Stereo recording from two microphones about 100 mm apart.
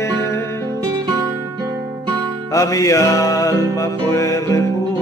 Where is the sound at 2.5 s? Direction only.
35° left (ahead or behind).